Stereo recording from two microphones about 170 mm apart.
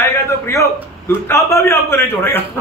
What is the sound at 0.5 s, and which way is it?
A man's voice, 15° left (ahead or behind).